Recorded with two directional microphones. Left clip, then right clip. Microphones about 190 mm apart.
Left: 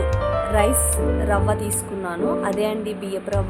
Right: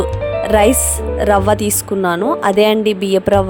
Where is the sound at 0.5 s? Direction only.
50° right (ahead or behind).